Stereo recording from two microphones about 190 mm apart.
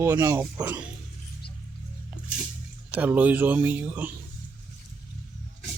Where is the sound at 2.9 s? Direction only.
10° right (ahead or behind).